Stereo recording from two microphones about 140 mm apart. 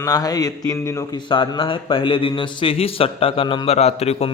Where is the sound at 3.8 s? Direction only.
50° left (ahead or behind).